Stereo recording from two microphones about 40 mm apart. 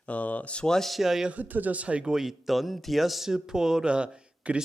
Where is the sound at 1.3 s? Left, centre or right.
Right.